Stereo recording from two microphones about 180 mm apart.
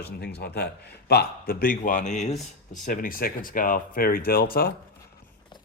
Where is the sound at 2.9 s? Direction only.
50° left (ahead or behind).